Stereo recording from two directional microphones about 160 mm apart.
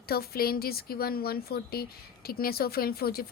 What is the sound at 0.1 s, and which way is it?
Speech, 70° left (ahead or behind).